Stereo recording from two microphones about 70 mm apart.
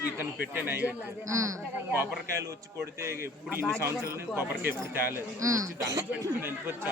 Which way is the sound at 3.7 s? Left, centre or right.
Right.